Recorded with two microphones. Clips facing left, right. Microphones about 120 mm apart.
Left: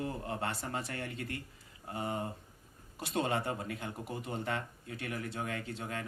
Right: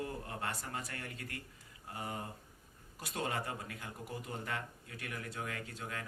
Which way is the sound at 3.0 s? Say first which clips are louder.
Left 5 dB; 25° left (ahead or behind).